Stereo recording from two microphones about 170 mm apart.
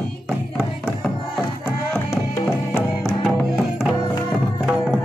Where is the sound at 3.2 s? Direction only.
5° right (ahead or behind).